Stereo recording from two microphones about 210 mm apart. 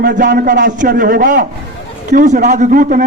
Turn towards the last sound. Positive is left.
turn(degrees=-40)  # may be behind; listen again after turning